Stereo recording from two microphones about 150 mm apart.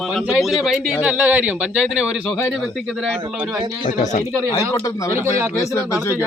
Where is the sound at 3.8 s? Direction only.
55° left (ahead or behind).